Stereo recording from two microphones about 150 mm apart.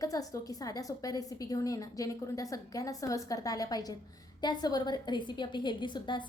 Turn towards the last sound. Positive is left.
turn(degrees=30)  # may be behind; listen again after turning